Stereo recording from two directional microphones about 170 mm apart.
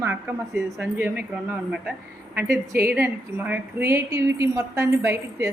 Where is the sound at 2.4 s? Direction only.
65° right (ahead or behind).